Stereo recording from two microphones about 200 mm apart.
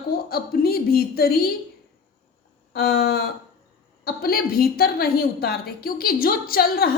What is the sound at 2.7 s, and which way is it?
A woman's voice, 50° left (ahead or behind).